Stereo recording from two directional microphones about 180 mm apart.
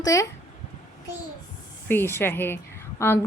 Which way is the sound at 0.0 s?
20° left (ahead or behind).